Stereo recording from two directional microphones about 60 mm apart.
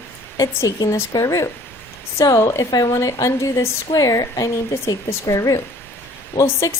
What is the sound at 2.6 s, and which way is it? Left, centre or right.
A woman's voice, left.